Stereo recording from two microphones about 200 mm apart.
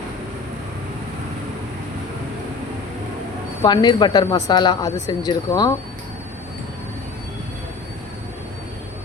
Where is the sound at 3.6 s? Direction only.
20° left (ahead or behind).